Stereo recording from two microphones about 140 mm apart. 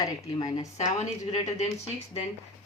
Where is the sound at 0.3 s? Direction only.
35° left (ahead or behind).